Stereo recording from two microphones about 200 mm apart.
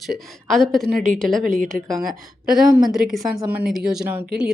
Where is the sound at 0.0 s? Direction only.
Centre (ahead or behind).